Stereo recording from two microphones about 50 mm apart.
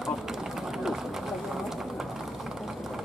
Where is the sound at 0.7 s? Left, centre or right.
Centre.